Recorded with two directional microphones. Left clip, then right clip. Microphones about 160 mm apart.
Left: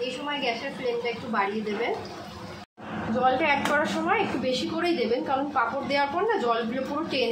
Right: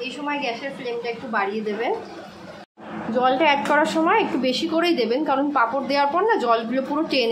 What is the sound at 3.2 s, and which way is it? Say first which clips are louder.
A woman's voice: right 4 dB; 30° right (ahead or behind).